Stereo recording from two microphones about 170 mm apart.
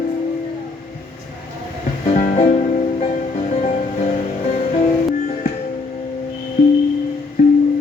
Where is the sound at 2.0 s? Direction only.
45° left (ahead or behind).